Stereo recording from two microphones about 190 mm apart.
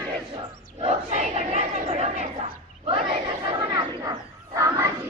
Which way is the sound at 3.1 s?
30° right (ahead or behind).